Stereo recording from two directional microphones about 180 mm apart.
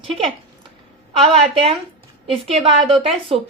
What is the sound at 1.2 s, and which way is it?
Speech, 35° right (ahead or behind).